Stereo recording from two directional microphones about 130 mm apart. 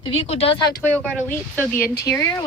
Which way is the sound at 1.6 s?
15° left (ahead or behind).